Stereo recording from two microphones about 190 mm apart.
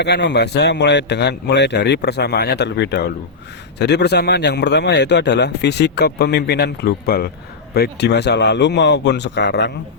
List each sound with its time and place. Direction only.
0.0 s a man's voice: 65° left (ahead or behind)